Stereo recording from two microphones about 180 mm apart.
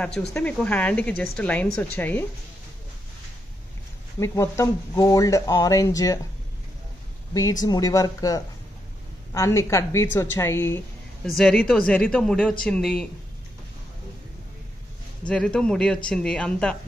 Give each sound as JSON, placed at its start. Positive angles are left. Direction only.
{"t": 0.3, "sound": "a woman's voice", "side_deg": 5}
{"t": 4.2, "sound": "speech", "side_deg": 15}
{"t": 7.6, "sound": "a woman's voice", "side_deg": 20}
{"t": 11.2, "sound": "speech", "side_deg": 5}
{"t": 15.2, "sound": "speech", "side_deg": 5}